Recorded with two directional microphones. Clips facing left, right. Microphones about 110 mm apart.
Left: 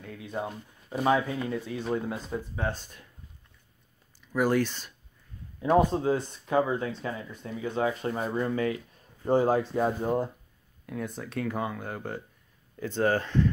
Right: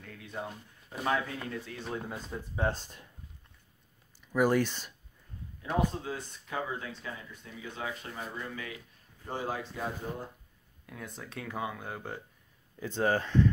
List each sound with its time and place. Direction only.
0.0 s speech: 15° left (ahead or behind)
1.9 s speech: 5° left (ahead or behind)
2.7 s speech: 30° right (ahead or behind)
4.3 s speech: 10° right (ahead or behind)
5.7 s speech: 45° left (ahead or behind)
6.1 s speech: 35° left (ahead or behind); by 10.1 s 50° left (ahead or behind)
10.9 s speech: centre (ahead or behind)